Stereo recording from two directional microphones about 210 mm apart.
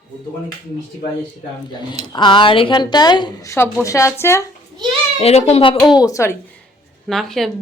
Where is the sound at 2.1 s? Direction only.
20° left (ahead or behind).